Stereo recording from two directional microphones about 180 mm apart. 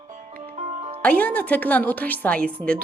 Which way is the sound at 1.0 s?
10° left (ahead or behind).